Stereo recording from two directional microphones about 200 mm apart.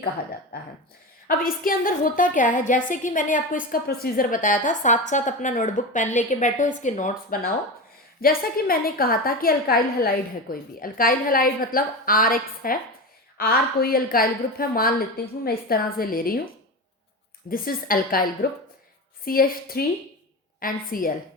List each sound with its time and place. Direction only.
1.3 s a woman's voice: 45° left (ahead or behind)
17.5 s a woman's voice: 45° left (ahead or behind)